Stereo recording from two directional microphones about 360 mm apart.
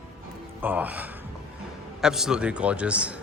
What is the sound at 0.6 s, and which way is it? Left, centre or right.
A man's voice, centre.